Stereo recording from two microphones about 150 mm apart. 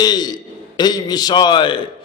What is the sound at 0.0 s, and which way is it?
A man's voice, 25° left (ahead or behind).